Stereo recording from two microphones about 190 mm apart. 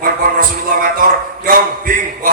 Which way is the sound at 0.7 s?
50° right (ahead or behind).